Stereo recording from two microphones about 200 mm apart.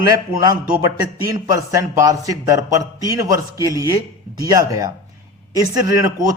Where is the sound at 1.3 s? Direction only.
15° right (ahead or behind).